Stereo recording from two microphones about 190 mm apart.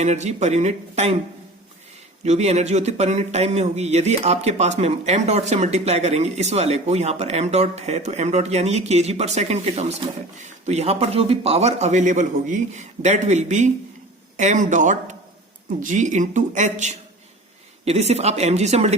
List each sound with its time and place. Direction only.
0.0 s speech: 35° right (ahead or behind)
2.2 s speech: 35° right (ahead or behind)